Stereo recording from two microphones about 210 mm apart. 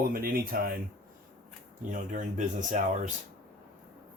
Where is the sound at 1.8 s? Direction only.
35° right (ahead or behind).